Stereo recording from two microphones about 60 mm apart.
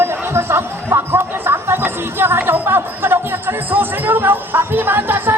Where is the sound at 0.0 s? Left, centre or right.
Right.